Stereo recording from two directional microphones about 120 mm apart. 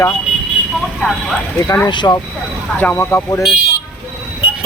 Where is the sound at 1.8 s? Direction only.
35° left (ahead or behind).